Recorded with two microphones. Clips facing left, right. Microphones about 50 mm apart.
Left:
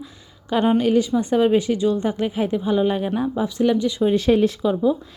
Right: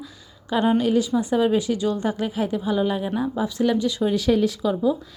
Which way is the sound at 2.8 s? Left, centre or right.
Left.